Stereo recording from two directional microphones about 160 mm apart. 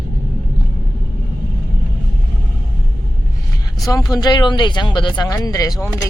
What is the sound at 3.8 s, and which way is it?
Speech, 25° left (ahead or behind).